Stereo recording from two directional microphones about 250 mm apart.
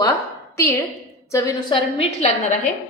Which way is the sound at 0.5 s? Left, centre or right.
Centre.